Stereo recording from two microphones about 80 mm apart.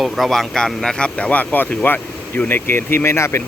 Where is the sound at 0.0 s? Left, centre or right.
Centre; by 3.4 s left.